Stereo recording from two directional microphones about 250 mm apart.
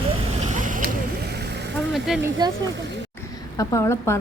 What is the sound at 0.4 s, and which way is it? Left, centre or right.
Vehicle, right.